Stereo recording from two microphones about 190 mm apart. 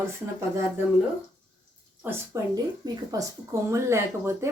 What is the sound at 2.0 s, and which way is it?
Speech, 10° right (ahead or behind).